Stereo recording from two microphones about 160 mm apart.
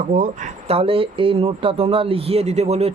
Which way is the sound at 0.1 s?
55° right (ahead or behind).